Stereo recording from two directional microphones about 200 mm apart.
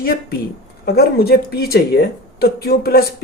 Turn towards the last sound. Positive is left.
turn(degrees=50)  # may be behind; listen again after turning